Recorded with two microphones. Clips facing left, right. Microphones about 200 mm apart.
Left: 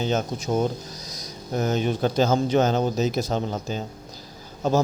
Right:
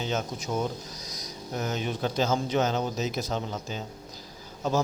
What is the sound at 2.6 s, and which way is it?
Speech, 30° left (ahead or behind).